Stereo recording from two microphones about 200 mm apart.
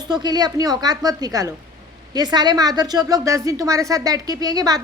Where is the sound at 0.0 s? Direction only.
20° right (ahead or behind).